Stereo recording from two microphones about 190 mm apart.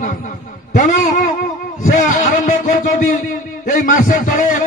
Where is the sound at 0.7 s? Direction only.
45° left (ahead or behind).